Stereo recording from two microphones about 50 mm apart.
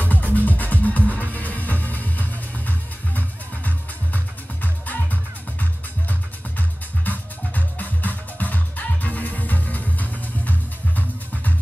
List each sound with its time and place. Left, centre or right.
0.0 s music: left